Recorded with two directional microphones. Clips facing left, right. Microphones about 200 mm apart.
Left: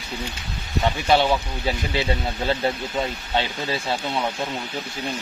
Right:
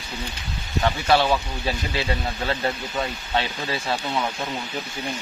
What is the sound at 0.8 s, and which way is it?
Speech, 20° left (ahead or behind).